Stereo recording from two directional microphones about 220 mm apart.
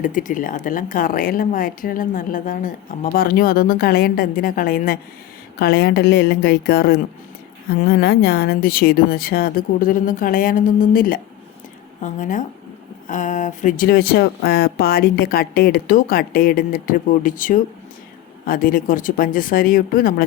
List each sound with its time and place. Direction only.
0.0 s a woman's voice: 35° left (ahead or behind)